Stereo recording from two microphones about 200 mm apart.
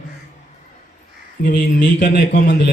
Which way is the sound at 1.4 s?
55° left (ahead or behind).